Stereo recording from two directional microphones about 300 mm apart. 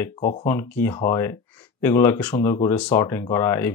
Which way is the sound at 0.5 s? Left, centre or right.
Centre.